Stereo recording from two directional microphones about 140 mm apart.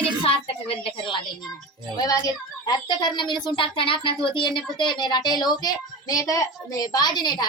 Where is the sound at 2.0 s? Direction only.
25° left (ahead or behind).